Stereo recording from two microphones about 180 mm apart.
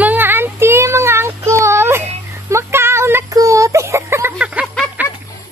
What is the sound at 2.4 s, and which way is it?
Child singing, 15° right (ahead or behind).